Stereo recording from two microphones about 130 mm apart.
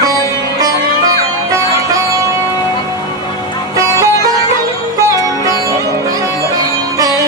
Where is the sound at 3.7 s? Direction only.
25° right (ahead or behind).